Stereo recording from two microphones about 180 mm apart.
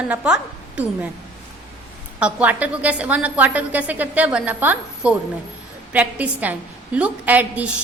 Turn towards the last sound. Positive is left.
turn(degrees=-10)  # may be behind; listen again after turning